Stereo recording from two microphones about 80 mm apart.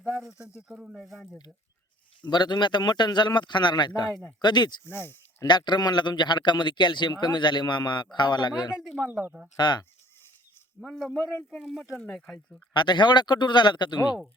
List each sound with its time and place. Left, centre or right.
0.3 s speech: centre
1.0 s speech: centre
2.2 s speech: left
4.9 s speech: left
5.5 s speech: left
10.8 s speech: centre
11.9 s speech: centre
12.7 s speech: left